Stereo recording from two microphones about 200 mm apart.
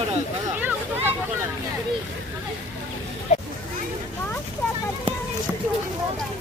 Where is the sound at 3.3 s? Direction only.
35° left (ahead or behind).